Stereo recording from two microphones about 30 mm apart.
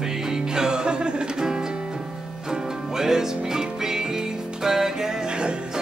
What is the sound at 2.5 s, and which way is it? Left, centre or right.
Music, centre.